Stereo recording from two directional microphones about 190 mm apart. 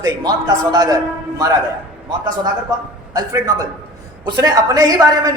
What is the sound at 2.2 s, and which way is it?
A woman's voice, 20° right (ahead or behind).